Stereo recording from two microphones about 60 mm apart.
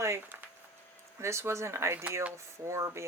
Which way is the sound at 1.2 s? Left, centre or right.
Right.